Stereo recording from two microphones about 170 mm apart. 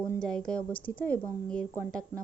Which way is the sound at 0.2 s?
5° left (ahead or behind).